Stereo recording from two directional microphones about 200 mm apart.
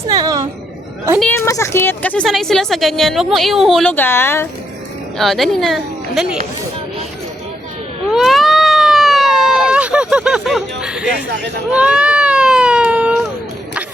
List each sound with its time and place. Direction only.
0.1 s a sound: 20° right (ahead or behind)
1.2 s speech: 10° left (ahead or behind)
5.1 s a woman's voice: centre (ahead or behind)
8.1 s cat: centre (ahead or behind)
9.7 s speech: 5° right (ahead or behind)
11.7 s baby cry: 5° right (ahead or behind)